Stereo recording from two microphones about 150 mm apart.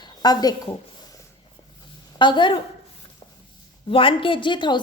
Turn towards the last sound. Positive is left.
turn(degrees=30)  # may be behind; listen again after turning